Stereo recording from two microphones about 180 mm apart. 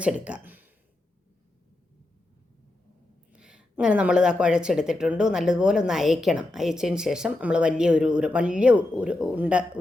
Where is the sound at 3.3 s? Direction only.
5° right (ahead or behind).